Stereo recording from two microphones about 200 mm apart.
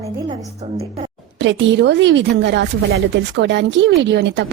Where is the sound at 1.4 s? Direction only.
65° right (ahead or behind).